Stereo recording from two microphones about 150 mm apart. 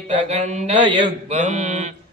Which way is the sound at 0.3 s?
50° right (ahead or behind).